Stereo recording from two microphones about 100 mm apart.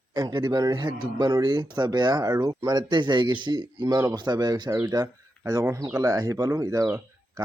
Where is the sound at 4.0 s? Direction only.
40° right (ahead or behind).